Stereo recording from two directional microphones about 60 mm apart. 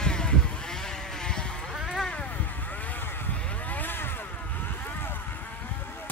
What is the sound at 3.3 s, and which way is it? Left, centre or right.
Vehicle, left.